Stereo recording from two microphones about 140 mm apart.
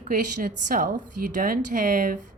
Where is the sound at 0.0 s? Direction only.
75° right (ahead or behind).